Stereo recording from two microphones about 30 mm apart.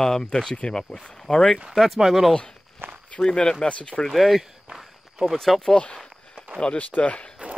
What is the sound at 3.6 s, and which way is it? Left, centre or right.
Speech, left.